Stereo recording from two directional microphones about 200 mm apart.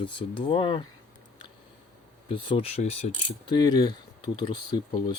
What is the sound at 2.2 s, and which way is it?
Speech, 25° left (ahead or behind).